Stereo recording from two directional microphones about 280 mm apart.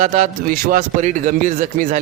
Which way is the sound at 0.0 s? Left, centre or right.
Right.